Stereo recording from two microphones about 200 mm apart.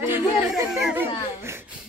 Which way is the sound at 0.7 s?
5° right (ahead or behind).